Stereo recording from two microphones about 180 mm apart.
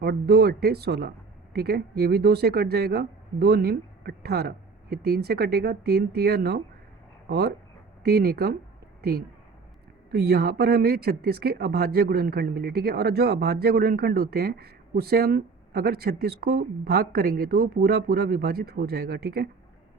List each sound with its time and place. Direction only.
0.0 s speech: 60° right (ahead or behind)
9.0 s a sound: 60° right (ahead or behind)
10.1 s speech: 65° right (ahead or behind)